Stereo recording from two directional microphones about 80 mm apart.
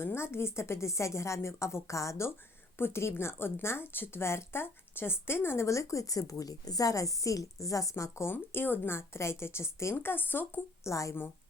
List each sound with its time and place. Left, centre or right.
0.0 s a woman's voice: left